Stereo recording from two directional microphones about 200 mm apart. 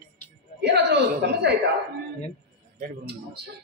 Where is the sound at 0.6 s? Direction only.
55° right (ahead or behind).